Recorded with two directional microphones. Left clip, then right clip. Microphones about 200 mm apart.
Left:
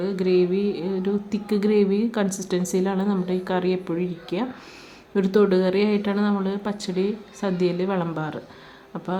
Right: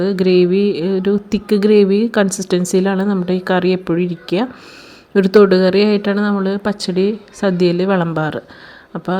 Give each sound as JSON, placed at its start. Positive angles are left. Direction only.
{"t": 0.0, "sound": "speech", "side_deg": -30}